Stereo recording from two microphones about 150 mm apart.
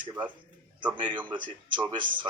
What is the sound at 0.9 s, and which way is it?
Speech, 35° right (ahead or behind).